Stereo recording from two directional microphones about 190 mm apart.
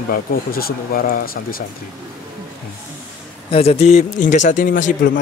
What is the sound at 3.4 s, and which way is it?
A man's voice, 30° left (ahead or behind).